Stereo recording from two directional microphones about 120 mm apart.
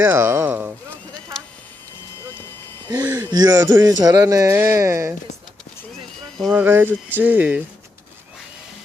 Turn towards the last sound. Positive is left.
turn(degrees=-10)  # may be behind; listen again after turning